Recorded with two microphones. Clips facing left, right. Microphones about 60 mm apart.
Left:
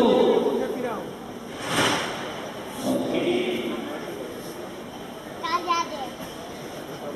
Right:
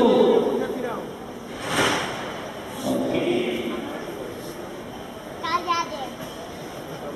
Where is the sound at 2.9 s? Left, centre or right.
Centre.